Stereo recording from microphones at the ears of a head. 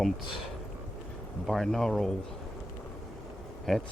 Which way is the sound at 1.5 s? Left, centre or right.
Centre.